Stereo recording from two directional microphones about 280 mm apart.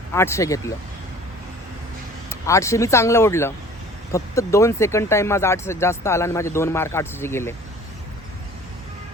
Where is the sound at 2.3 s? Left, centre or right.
Centre.